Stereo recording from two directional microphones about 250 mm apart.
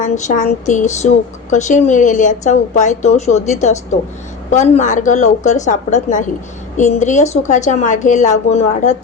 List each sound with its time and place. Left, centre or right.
0.0 s a woman's voice: left